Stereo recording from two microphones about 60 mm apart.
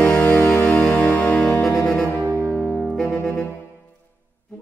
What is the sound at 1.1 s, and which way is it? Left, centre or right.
Music, left.